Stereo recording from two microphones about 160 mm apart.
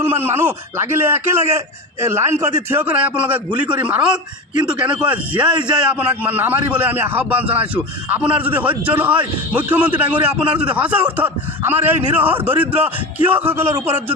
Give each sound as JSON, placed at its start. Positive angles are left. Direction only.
{"t": 0.0, "sound": "a man's voice", "side_deg": -15}